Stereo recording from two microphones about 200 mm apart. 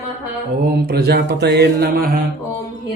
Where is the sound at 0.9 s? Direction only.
55° right (ahead or behind).